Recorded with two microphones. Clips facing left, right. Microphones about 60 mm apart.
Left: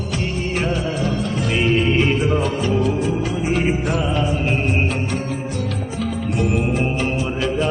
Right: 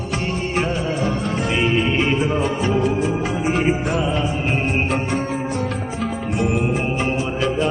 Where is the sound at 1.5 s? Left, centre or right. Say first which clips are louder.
Left 2 dB; centre.